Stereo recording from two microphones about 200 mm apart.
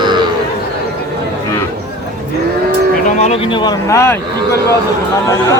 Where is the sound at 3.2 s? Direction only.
30° left (ahead or behind); by 4.2 s 15° left (ahead or behind).